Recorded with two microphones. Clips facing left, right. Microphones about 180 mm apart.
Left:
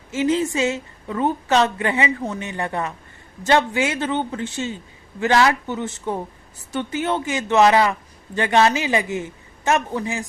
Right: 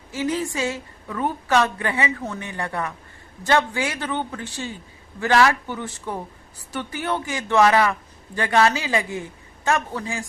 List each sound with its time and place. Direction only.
0.1 s a woman's voice: 25° left (ahead or behind)